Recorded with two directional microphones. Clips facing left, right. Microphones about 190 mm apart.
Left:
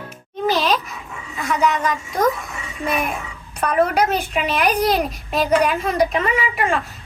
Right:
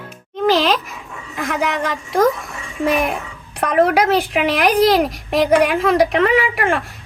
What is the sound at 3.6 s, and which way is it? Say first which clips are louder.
A woman's voice: right 3 dB; 90° right.